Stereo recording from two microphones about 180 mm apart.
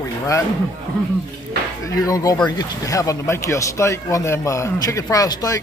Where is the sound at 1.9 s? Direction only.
20° left (ahead or behind).